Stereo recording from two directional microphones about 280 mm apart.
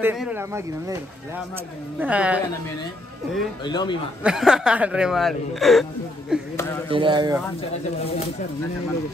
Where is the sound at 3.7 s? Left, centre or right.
Centre.